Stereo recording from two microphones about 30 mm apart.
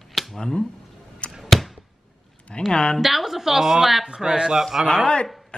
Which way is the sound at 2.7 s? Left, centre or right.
Left.